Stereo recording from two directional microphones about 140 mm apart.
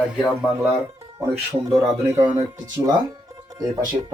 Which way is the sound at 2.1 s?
25° right (ahead or behind).